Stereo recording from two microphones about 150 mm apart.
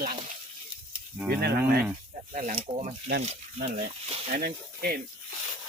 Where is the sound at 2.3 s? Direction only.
55° right (ahead or behind).